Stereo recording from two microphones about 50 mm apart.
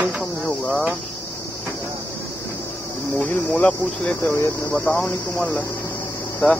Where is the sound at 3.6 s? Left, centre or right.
Left.